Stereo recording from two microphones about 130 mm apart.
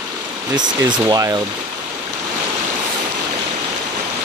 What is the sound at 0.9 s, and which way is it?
Speech, 30° right (ahead or behind).